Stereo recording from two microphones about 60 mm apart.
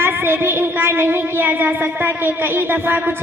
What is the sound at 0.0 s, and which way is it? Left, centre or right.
Music, right.